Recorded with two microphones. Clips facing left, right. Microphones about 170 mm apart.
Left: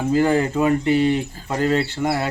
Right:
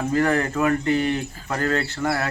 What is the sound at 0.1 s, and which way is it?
Speech, 30° left (ahead or behind).